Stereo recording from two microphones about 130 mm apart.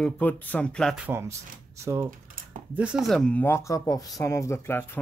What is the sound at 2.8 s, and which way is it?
Speech, 5° right (ahead or behind).